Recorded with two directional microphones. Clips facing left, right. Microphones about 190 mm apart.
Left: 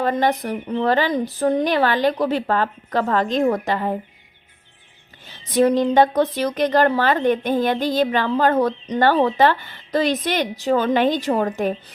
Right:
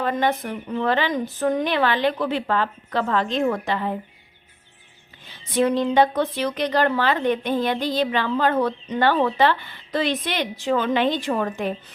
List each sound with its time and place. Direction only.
0.0 s speech: 40° left (ahead or behind)
5.5 s a woman's voice: 40° left (ahead or behind)